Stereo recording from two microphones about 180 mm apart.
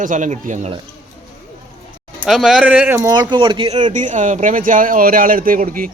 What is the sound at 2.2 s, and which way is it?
A man's voice, centre (ahead or behind).